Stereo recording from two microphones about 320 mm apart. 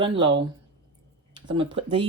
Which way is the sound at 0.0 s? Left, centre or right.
Centre.